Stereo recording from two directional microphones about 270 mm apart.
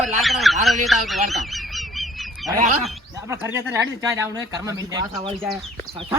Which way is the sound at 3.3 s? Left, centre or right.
Centre.